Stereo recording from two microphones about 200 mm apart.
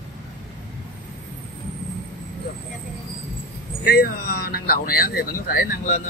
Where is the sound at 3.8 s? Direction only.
50° left (ahead or behind).